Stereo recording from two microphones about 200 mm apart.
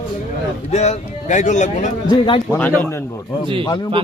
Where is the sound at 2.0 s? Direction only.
25° left (ahead or behind).